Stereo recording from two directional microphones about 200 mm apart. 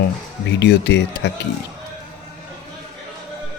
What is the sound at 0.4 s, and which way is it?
Speech, 60° left (ahead or behind).